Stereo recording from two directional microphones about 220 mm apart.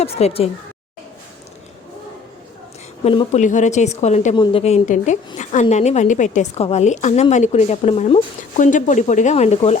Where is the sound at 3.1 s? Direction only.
30° left (ahead or behind).